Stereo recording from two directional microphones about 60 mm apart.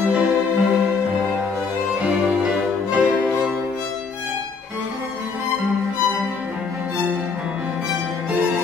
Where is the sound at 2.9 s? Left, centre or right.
Right.